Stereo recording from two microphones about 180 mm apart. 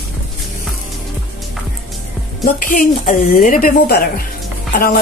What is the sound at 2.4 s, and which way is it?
A woman's voice, 55° left (ahead or behind).